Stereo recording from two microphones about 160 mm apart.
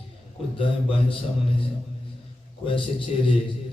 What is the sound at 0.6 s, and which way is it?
Speech, 35° left (ahead or behind).